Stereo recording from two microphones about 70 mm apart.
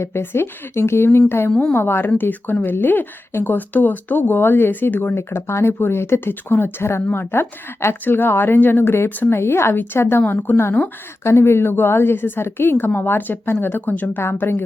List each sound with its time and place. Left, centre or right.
0.0 s speech: left
5.1 s speech: left
14.2 s speech: left